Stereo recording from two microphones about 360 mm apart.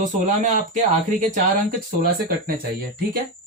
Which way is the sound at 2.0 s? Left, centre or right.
Right.